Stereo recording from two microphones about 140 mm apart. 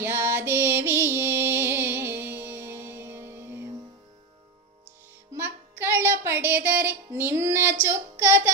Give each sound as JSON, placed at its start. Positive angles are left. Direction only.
{"t": 0.0, "sound": "music", "side_deg": -15}
{"t": 5.3, "sound": "music", "side_deg": -15}
{"t": 8.2, "sound": "child singing", "side_deg": -15}